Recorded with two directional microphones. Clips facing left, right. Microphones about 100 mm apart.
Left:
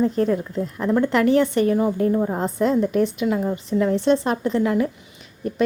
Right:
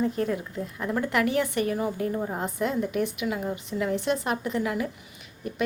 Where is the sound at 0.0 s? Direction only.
35° left (ahead or behind).